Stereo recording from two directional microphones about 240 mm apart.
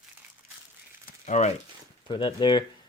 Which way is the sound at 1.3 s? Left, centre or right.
Left.